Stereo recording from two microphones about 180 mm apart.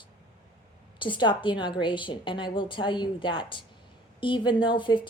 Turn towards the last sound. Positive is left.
turn(degrees=25)  # may be behind; listen again after turning